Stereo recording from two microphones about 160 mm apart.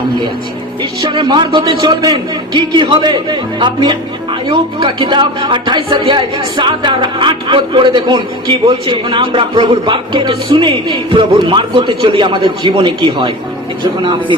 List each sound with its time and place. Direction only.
0.8 s speech: 30° right (ahead or behind)